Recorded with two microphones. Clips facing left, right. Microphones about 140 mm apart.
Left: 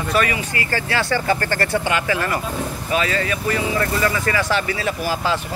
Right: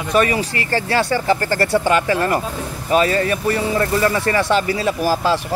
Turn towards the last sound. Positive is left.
turn(degrees=-35)  # may be behind; listen again after turning